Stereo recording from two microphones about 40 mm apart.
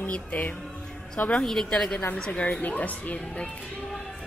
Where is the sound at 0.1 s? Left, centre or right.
Left.